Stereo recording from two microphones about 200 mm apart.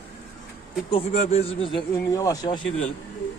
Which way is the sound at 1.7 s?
15° left (ahead or behind).